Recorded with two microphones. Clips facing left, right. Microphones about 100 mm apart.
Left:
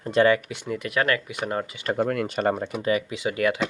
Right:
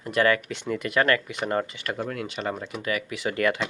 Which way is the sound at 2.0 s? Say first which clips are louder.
Left 8 dB; 50° left (ahead or behind).